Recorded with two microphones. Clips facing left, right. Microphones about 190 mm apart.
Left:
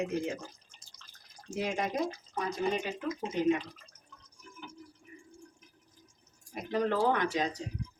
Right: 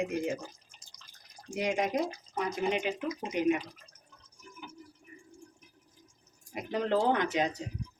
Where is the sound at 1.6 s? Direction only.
15° right (ahead or behind).